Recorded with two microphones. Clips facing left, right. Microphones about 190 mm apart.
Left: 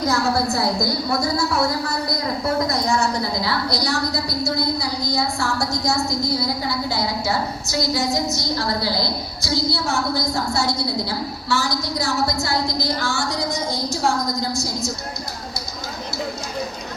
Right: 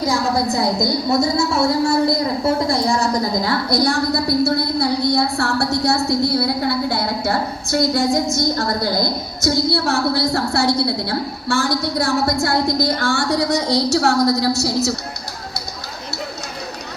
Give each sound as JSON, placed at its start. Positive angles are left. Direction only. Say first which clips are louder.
{"t": 0.0, "sound": "a woman's voice", "louder": "right 1 dB", "side_deg": -15}
{"t": 3.4, "sound": "a woman's voice", "louder": "right 5 dB", "side_deg": -50}